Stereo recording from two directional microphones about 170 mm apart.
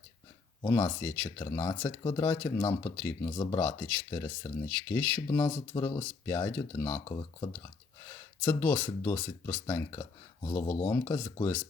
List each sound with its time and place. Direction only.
0.6 s speech: 20° left (ahead or behind)
3.2 s speech: 25° left (ahead or behind)
3.6 s speech: 15° left (ahead or behind)
7.0 s speech: 25° left (ahead or behind)
8.4 s speech: 15° left (ahead or behind)